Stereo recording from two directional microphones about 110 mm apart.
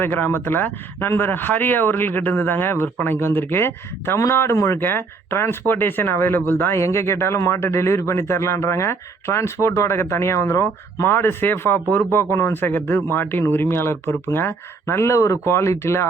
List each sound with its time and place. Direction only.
0.0 s speech: 20° left (ahead or behind)